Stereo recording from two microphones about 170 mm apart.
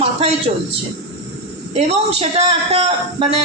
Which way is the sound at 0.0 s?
35° right (ahead or behind).